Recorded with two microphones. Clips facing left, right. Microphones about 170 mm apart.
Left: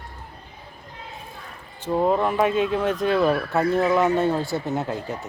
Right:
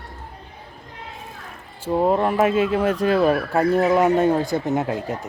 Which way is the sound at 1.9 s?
10° right (ahead or behind).